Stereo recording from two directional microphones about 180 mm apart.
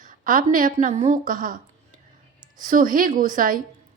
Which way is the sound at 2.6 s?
50° right (ahead or behind).